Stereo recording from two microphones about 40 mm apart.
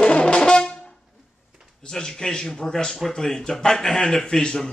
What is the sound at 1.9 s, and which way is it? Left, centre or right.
Speech, centre.